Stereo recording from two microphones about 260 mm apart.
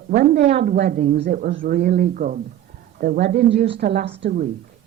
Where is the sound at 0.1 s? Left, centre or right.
Right.